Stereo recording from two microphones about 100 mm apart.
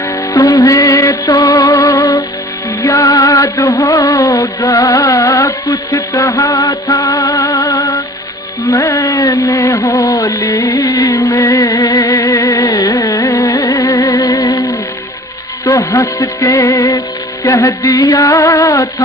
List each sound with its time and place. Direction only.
0.3 s music: 40° left (ahead or behind)
12.3 s carnatic music: 30° left (ahead or behind)
13.6 s music: 35° left (ahead or behind)